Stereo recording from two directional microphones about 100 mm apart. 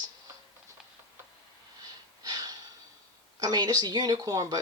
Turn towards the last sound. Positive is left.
turn(degrees=-40)  # may be behind; listen again after turning